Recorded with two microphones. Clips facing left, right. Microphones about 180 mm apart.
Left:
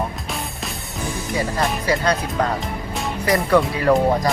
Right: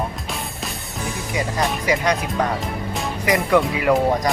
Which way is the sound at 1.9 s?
15° right (ahead or behind).